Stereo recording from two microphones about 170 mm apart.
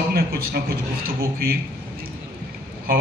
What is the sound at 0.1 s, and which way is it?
Speech, 65° right (ahead or behind).